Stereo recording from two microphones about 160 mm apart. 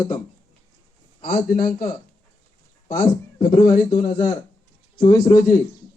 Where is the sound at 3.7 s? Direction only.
30° left (ahead or behind).